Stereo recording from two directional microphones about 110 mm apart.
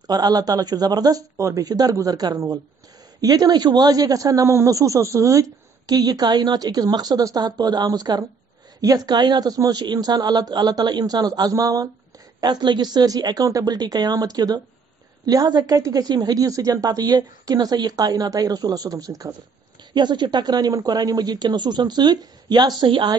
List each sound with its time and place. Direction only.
0.0 s speech: 35° right (ahead or behind)